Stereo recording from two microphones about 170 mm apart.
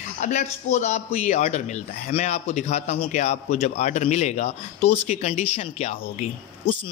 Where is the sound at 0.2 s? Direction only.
45° left (ahead or behind).